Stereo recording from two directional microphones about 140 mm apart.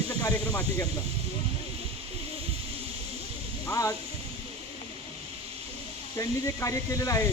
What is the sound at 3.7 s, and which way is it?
Speech, 25° left (ahead or behind).